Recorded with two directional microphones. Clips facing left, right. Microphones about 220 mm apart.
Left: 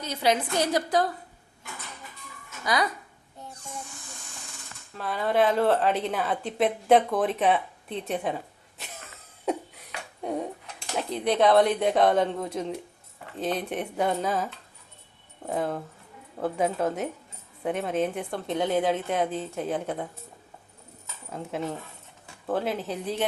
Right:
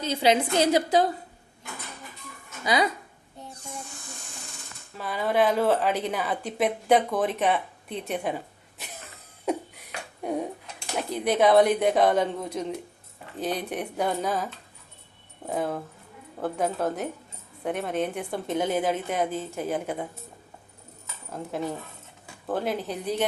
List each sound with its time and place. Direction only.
0.0 s a woman's voice: 25° right (ahead or behind)
2.6 s a woman's voice: 25° right (ahead or behind)
4.9 s a woman's voice: 5° right (ahead or behind)
10.2 s dishes: centre (ahead or behind)
11.1 s a woman's voice: 5° right (ahead or behind)
21.2 s a woman's voice: centre (ahead or behind)